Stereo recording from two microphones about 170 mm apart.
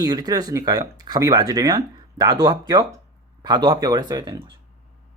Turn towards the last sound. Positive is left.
turn(degrees=-25)  # may be behind; listen again after turning